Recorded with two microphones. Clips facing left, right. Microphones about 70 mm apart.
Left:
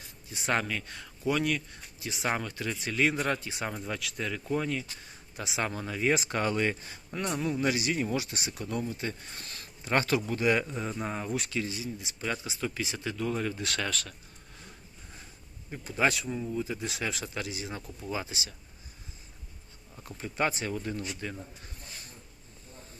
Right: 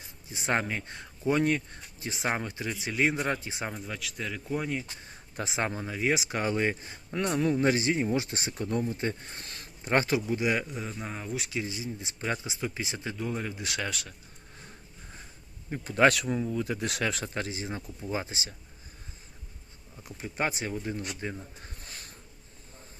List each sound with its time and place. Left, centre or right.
0.0 s speech: right
3.7 s speech: centre
5.0 s a sound: right
5.8 s speech: centre
6.5 s speech: right
7.3 s speech: right
10.2 s speech: centre
11.5 s speech: right
15.7 s speech: right
16.0 s speech: right
20.1 s speech: centre
21.2 s speech: right